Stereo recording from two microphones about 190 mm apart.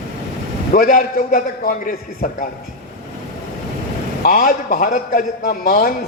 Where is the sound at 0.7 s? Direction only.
40° left (ahead or behind).